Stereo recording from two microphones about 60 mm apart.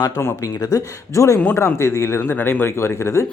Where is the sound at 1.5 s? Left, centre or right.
Left.